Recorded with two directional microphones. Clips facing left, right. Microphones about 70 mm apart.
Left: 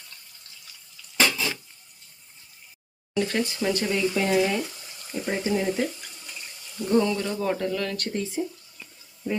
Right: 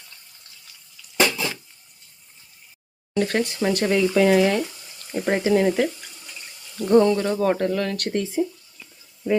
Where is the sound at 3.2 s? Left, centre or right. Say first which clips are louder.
Right 3 dB; right.